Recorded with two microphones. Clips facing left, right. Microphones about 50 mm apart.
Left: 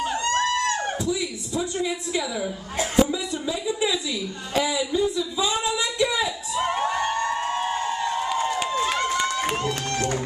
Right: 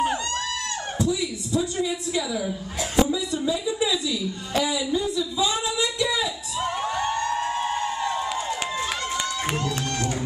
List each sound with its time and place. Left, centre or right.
0.3 s a sound: left
8.4 s run: left
9.1 s crowd: left